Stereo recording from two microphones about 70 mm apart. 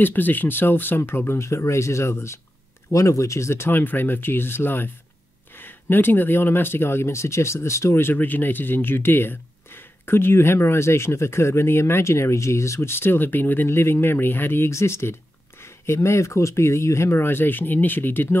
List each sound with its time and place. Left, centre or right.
0.0 s speech: left